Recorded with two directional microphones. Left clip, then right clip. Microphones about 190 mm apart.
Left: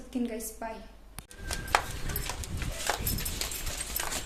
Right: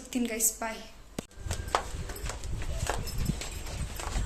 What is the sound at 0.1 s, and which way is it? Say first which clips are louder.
Speech: right 1 dB; 10° right (ahead or behind).